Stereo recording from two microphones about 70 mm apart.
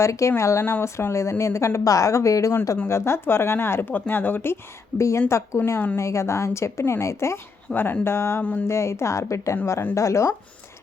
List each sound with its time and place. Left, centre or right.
0.0 s speech: left
2.7 s speech: left
4.9 s speech: left
7.7 s speech: left
8.4 s speech: left
8.6 s speech: left